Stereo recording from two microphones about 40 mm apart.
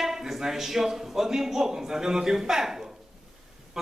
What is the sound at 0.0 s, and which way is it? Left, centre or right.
A woman's voice, centre.